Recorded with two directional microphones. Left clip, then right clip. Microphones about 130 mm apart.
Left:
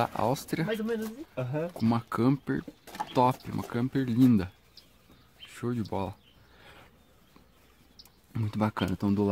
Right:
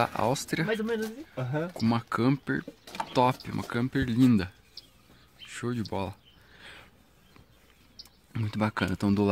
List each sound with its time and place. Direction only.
0.0 s speech: 5° right (ahead or behind)
0.3 s speech: 5° left (ahead or behind)
0.7 s speech: 50° right (ahead or behind)
1.7 s speech: 5° left (ahead or behind)
3.1 s a sound: 5° left (ahead or behind)
3.4 s speech: 5° right (ahead or behind)
5.5 s a sound: 10° left (ahead or behind)
5.9 s speech: 10° left (ahead or behind)
6.6 s a sound: 10° left (ahead or behind)
8.3 s speech: 10° left (ahead or behind)
8.9 s speech: 10° right (ahead or behind)